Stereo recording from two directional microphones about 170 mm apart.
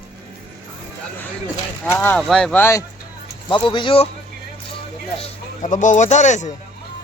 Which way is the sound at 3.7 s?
30° left (ahead or behind).